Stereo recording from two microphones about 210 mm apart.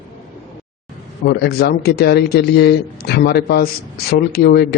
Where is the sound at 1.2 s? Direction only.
50° left (ahead or behind).